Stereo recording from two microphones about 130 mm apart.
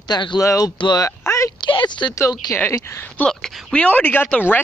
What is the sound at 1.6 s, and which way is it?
Speech, 35° left (ahead or behind).